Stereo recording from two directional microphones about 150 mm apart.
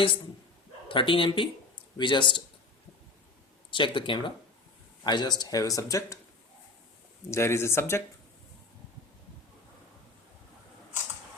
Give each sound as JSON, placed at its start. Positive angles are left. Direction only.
{"t": 0.9, "sound": "speech", "side_deg": 35}
{"t": 3.7, "sound": "speech", "side_deg": 35}
{"t": 7.3, "sound": "speech", "side_deg": 20}